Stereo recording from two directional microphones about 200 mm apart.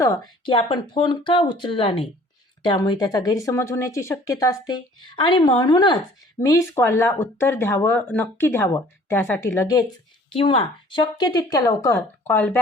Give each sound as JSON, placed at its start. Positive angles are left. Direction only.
{"t": 0.0, "sound": "speech", "side_deg": 15}
{"t": 10.3, "sound": "speech", "side_deg": 25}